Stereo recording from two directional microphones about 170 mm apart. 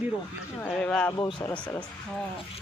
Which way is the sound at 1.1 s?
25° left (ahead or behind).